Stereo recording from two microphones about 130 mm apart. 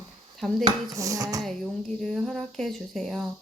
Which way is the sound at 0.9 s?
25° right (ahead or behind).